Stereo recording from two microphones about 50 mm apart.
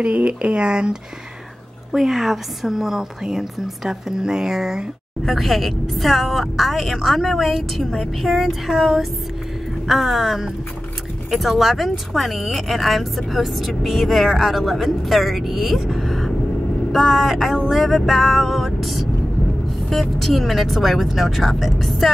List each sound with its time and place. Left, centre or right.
0.0 s speech: right
1.9 s a woman's voice: centre
5.2 s speech: centre